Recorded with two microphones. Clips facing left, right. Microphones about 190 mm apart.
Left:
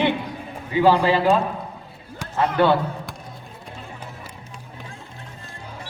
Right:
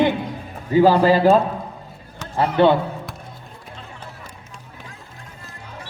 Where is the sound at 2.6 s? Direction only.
25° right (ahead or behind).